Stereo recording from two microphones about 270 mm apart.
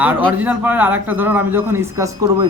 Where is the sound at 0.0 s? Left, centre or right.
Centre.